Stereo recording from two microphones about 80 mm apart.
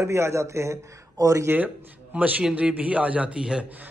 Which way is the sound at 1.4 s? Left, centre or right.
Right.